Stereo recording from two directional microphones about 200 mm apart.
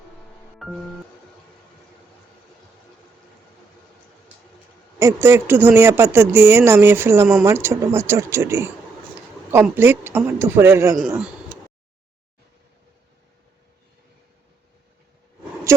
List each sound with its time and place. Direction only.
0.6 s music: centre (ahead or behind)
4.9 s speech: 15° right (ahead or behind)